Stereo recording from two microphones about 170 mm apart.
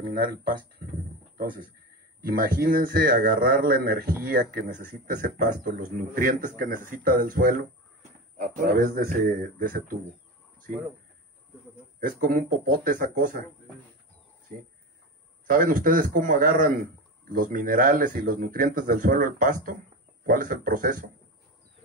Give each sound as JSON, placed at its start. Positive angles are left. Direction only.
{"t": 0.0, "sound": "speech", "side_deg": -60}
{"t": 2.2, "sound": "speech", "side_deg": -55}
{"t": 12.0, "sound": "speech", "side_deg": -55}
{"t": 15.4, "sound": "speech", "side_deg": -55}